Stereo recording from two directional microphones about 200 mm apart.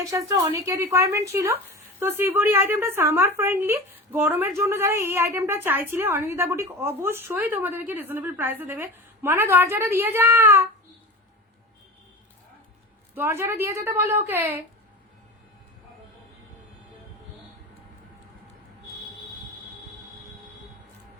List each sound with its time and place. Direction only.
0.0 s a woman's voice: 15° right (ahead or behind)
13.1 s a woman's voice: 10° right (ahead or behind)